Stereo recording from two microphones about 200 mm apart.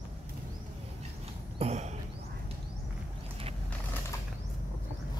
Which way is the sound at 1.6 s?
35° right (ahead or behind).